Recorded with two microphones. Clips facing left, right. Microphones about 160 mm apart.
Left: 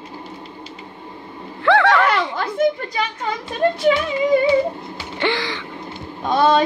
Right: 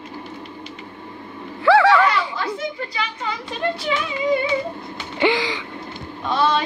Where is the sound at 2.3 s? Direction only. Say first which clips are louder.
Left 7 dB; 50° left (ahead or behind).